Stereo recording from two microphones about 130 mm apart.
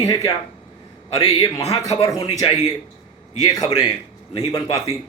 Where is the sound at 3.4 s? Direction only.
30° left (ahead or behind).